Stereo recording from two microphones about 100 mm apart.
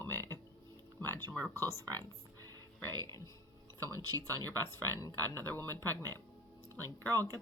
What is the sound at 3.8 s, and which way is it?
Speech, 35° right (ahead or behind).